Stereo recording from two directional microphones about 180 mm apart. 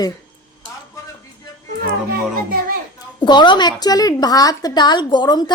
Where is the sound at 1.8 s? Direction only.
55° right (ahead or behind).